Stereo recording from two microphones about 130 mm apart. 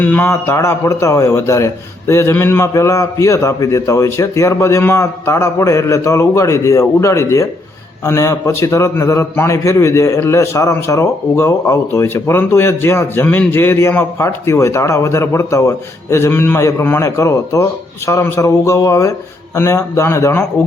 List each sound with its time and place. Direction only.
0.0 s a man's voice: 15° left (ahead or behind)